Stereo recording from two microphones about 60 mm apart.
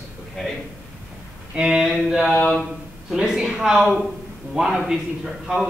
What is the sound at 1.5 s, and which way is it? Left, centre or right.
Speech, centre.